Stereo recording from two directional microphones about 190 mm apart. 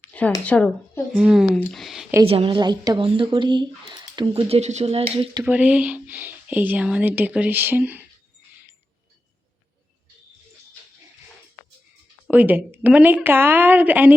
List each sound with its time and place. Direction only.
0.0 s a sound: 5° left (ahead or behind)
0.4 s speech: 10° left (ahead or behind)
1.2 s speech: 5° right (ahead or behind)
2.2 s speech: 30° right (ahead or behind)
5.4 s speech: 10° right (ahead or behind)
12.3 s speech: 10° right (ahead or behind)